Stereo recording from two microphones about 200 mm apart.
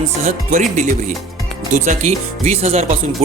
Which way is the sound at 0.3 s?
40° right (ahead or behind).